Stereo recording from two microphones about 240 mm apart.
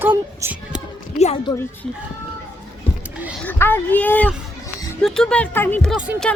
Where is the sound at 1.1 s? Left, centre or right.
Left.